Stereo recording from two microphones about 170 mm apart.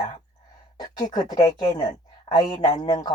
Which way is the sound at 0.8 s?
20° left (ahead or behind).